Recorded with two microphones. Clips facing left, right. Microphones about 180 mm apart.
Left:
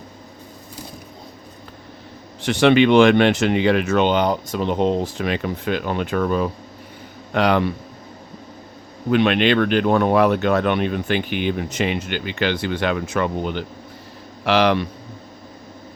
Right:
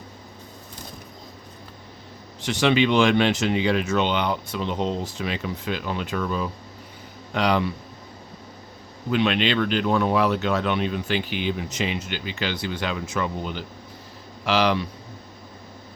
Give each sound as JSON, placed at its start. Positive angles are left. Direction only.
{"t": 2.4, "sound": "speech", "side_deg": 60}
{"t": 9.0, "sound": "speech", "side_deg": 55}